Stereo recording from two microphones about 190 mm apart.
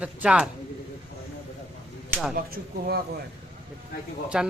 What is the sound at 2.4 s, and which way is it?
Speech, 50° right (ahead or behind).